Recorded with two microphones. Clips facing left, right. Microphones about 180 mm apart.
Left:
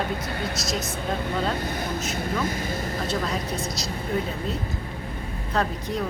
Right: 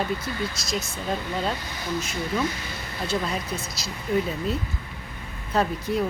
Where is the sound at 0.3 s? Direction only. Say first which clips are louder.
Even; 60° left (ahead or behind).